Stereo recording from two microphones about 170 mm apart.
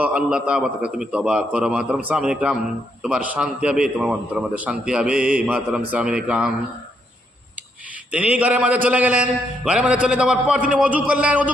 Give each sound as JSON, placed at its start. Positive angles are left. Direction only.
{"t": 0.0, "sound": "a man's voice", "side_deg": -5}
{"t": 8.1, "sound": "a man's voice", "side_deg": -10}